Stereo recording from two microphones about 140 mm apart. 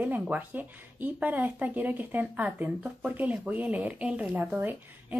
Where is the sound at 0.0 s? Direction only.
10° right (ahead or behind).